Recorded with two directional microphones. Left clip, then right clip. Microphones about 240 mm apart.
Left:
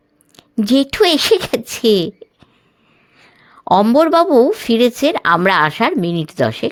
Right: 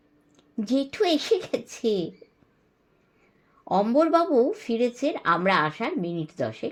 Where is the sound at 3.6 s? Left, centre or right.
Left.